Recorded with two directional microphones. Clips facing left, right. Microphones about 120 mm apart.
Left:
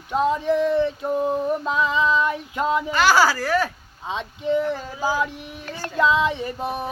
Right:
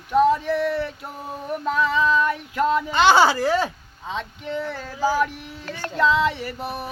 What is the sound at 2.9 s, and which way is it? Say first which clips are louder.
Speech: right 2 dB; 25° right (ahead or behind).